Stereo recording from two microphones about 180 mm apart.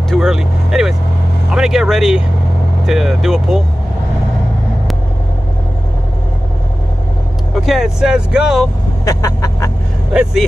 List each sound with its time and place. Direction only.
0.1 s speech: 5° right (ahead or behind)
7.5 s speech: centre (ahead or behind)
9.0 s vehicle: 20° left (ahead or behind)